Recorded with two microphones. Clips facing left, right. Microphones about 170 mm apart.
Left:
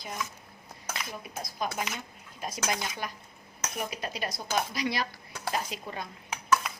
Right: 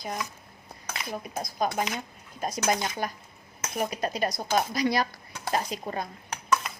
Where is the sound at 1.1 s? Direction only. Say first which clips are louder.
Right 6 dB; 45° right (ahead or behind).